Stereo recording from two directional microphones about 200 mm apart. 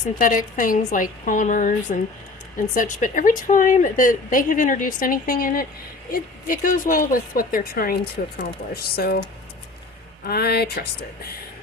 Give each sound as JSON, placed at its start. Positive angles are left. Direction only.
{"t": 0.0, "sound": "a woman's voice", "side_deg": 40}
{"t": 10.2, "sound": "speech", "side_deg": 50}